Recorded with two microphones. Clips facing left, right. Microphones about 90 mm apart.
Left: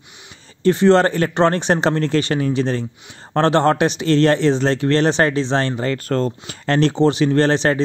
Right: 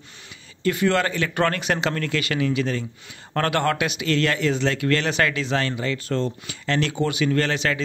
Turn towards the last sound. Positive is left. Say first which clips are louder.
# left 7 dB
turn(degrees=35)  # may be behind; listen again after turning